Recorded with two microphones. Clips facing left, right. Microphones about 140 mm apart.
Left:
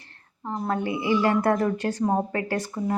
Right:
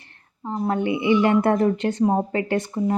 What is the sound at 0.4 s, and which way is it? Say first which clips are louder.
Speech: right 4 dB; 20° right (ahead or behind).